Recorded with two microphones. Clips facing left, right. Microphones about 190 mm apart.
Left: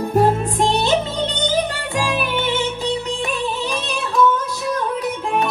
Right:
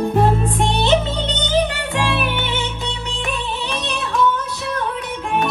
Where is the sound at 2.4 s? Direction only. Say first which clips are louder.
Left 4 dB; 40° left (ahead or behind).